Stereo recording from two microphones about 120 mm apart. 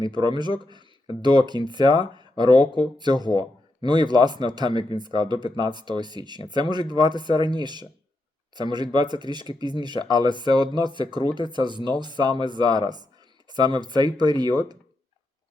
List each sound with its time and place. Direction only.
0.0 s speech: 40° right (ahead or behind)